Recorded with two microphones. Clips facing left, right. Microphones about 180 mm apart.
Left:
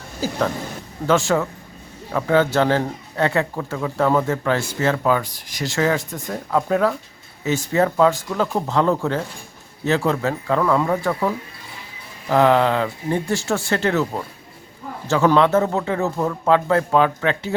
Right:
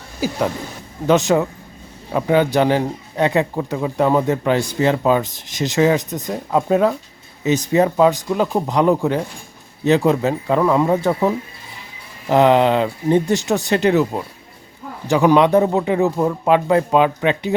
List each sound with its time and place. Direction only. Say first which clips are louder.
0.2 s speech: right 2 dB; 15° right (ahead or behind)